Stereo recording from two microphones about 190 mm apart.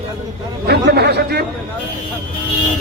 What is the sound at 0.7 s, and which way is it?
Speech, 60° right (ahead or behind).